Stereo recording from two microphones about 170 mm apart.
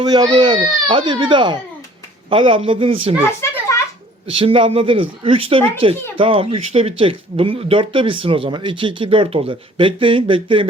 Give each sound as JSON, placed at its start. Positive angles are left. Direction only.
{"t": 0.0, "sound": "speech", "side_deg": -25}
{"t": 4.3, "sound": "speech", "side_deg": -35}